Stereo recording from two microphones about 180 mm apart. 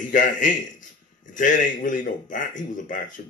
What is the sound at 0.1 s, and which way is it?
A man's voice, 45° left (ahead or behind).